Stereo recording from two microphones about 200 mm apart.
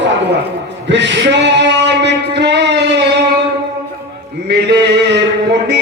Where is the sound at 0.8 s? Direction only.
60° right (ahead or behind).